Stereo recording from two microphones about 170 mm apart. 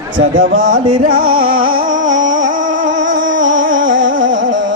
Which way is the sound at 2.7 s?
90° right.